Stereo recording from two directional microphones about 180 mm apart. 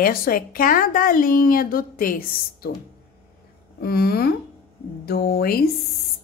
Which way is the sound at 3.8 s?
60° left (ahead or behind).